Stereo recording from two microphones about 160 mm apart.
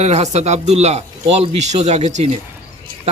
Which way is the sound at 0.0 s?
45° right (ahead or behind).